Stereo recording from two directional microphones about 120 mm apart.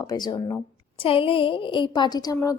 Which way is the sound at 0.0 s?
35° left (ahead or behind).